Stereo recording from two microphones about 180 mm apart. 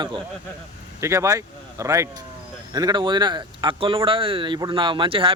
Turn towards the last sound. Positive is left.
turn(degrees=-30)  # may be behind; listen again after turning